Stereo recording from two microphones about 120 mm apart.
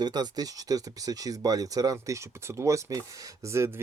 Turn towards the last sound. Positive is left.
turn(degrees=-20)  # may be behind; listen again after turning